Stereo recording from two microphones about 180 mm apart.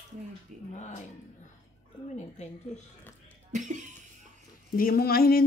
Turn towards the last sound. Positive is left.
turn(degrees=55)  # may be behind; listen again after turning